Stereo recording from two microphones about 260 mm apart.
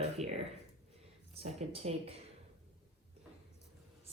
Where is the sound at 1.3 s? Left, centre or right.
Right.